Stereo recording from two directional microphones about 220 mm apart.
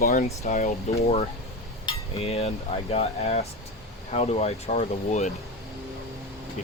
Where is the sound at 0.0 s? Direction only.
35° left (ahead or behind).